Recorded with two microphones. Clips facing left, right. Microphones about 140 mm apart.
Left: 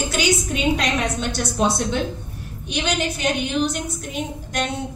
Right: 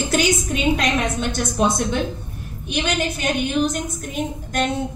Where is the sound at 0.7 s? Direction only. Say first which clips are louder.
Right 1 dB; 50° right (ahead or behind).